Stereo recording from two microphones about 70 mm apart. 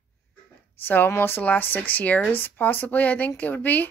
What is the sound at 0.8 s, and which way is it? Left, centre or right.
Speech, left.